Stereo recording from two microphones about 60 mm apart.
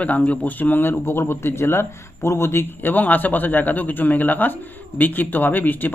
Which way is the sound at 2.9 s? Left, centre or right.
Left.